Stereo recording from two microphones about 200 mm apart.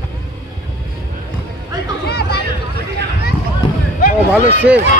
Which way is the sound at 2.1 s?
55° left (ahead or behind).